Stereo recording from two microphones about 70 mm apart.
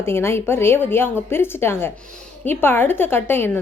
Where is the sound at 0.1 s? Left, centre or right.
Left.